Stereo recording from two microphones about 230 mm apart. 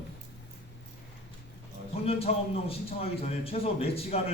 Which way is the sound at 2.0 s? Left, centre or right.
Left.